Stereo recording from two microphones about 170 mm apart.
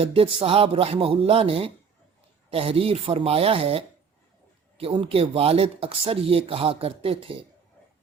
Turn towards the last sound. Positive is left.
turn(degrees=-30)  # may be behind; listen again after turning